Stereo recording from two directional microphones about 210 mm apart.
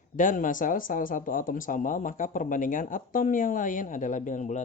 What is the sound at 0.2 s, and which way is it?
Speech, 40° left (ahead or behind).